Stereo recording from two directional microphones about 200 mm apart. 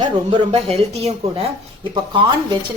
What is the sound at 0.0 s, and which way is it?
Speech, 25° right (ahead or behind).